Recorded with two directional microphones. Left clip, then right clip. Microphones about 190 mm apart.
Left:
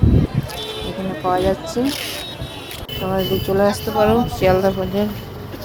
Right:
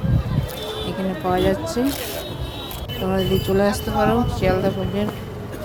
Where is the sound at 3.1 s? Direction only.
5° left (ahead or behind).